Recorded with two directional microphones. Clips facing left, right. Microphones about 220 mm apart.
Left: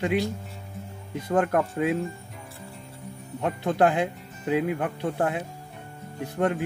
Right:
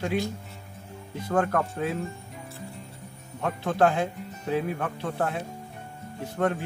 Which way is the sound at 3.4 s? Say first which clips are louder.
Left 1 dB; 20° left (ahead or behind).